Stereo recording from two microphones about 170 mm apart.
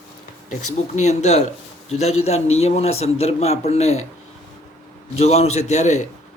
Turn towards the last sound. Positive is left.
turn(degrees=40)  # may be behind; listen again after turning